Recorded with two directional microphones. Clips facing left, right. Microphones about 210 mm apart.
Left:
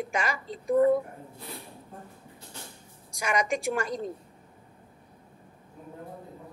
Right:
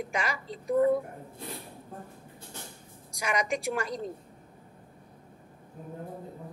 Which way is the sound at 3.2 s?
50° left (ahead or behind).